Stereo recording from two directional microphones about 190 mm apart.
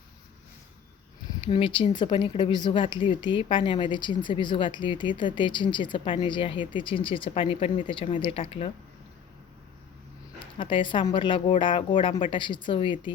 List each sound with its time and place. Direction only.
1.5 s speech: 25° left (ahead or behind)
10.4 s speech: 25° left (ahead or behind)